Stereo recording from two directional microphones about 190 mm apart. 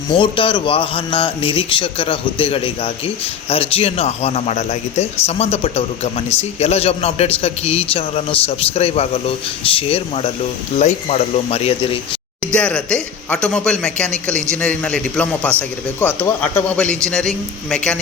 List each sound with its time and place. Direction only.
0.1 s a man's voice: 25° left (ahead or behind)
12.5 s a man's voice: 5° left (ahead or behind)